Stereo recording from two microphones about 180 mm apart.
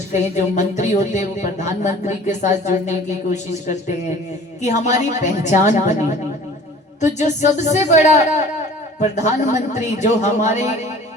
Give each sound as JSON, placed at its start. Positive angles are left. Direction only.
{"t": 0.1, "sound": "speech", "side_deg": 40}
{"t": 7.0, "sound": "speech", "side_deg": 40}